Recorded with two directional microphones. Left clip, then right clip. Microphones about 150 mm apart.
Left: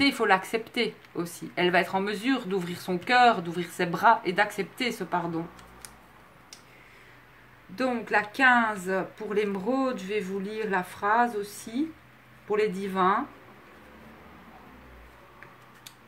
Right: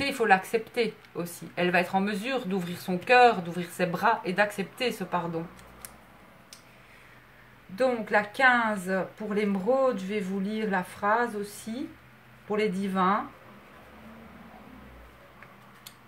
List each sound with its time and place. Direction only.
0.0 s a woman's voice: 45° left (ahead or behind)
7.7 s a woman's voice: 35° left (ahead or behind)
12.4 s a woman's voice: 40° left (ahead or behind)